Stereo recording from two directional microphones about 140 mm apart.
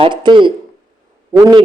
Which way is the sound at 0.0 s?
35° right (ahead or behind).